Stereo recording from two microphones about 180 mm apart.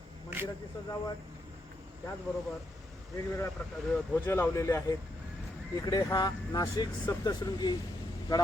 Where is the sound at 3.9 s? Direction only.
10° left (ahead or behind).